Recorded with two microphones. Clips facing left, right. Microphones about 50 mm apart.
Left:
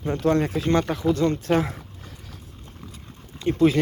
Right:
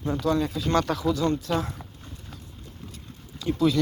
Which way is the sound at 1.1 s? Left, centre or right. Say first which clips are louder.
Left 4 dB; left.